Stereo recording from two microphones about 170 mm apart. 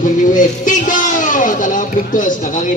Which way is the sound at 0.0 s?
50° left (ahead or behind).